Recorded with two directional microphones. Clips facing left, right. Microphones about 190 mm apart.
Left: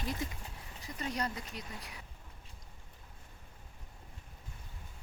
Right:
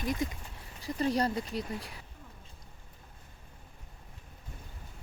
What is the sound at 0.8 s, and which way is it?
Speech, 30° right (ahead or behind).